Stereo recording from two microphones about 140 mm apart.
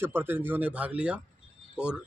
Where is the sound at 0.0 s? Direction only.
15° right (ahead or behind).